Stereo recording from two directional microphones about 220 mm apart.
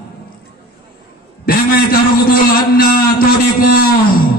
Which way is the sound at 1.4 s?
40° left (ahead or behind).